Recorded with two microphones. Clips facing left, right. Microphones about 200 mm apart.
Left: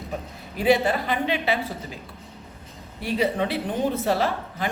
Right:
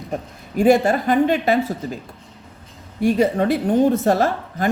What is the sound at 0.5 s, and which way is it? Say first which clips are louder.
Speech: right 6 dB; 50° right (ahead or behind).